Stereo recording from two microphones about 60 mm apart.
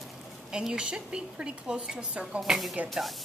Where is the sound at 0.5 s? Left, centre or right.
Centre.